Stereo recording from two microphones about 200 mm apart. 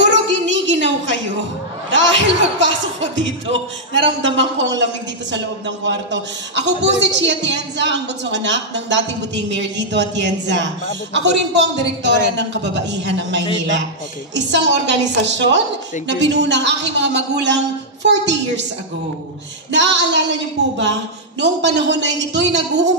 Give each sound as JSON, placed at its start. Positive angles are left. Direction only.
{"t": 0.0, "sound": "a sound", "side_deg": -65}
{"t": 1.9, "sound": "a woman's voice", "side_deg": -65}
{"t": 6.5, "sound": "a woman's voice", "side_deg": -60}
{"t": 19.7, "sound": "a woman's voice", "side_deg": -60}
{"t": 21.4, "sound": "a woman's voice", "side_deg": -60}